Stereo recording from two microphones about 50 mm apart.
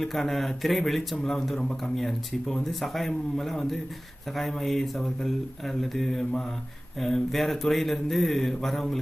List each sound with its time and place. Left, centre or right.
0.0 s speech: centre